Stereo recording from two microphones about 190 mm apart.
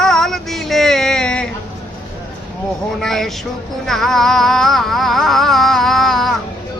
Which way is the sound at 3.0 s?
Centre (ahead or behind).